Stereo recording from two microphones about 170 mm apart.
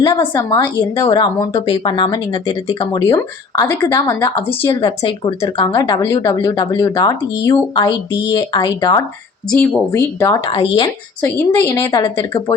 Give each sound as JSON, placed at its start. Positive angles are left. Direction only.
{"t": 0.2, "sound": "a woman's voice", "side_deg": 15}
{"t": 9.5, "sound": "a woman's voice", "side_deg": 10}
{"t": 11.2, "sound": "speech", "side_deg": 15}